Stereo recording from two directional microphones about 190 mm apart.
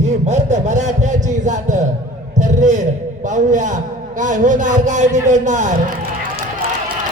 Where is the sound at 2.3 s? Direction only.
40° right (ahead or behind).